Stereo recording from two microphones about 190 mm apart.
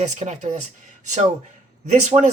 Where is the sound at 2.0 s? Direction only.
35° right (ahead or behind).